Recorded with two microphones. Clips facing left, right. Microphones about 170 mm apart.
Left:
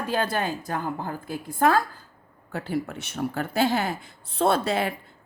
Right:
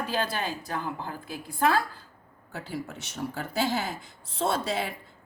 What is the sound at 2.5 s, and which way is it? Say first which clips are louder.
Speech: left 7 dB; 60° left (ahead or behind).